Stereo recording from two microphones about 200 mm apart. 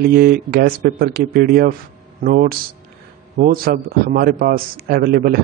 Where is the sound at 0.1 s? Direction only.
50° right (ahead or behind).